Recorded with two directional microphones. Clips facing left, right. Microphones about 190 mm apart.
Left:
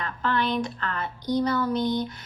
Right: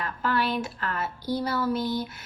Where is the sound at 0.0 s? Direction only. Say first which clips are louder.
Left 1 dB; 5° right (ahead or behind).